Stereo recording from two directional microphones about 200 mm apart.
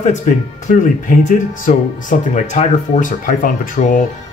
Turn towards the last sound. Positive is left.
turn(degrees=40)  # may be behind; listen again after turning